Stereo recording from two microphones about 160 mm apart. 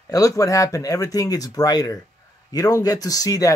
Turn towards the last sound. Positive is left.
turn(degrees=20)  # may be behind; listen again after turning